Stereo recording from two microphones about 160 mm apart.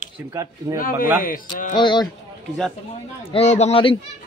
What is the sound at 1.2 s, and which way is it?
Speech, 60° left (ahead or behind).